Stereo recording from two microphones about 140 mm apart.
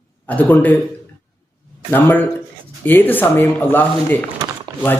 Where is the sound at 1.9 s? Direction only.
15° left (ahead or behind).